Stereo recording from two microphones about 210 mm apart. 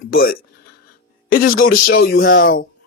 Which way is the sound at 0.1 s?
45° left (ahead or behind).